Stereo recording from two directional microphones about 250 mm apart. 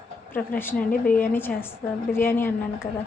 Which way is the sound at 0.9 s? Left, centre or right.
Left.